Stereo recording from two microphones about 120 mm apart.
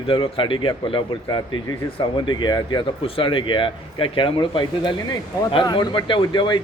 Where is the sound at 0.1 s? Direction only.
45° left (ahead or behind).